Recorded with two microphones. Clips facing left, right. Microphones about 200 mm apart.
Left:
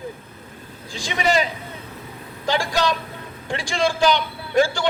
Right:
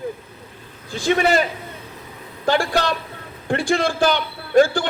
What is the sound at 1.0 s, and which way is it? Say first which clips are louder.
Speech: right 4 dB; 55° right (ahead or behind).